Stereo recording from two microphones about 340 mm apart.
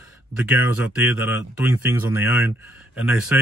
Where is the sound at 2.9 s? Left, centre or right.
Left.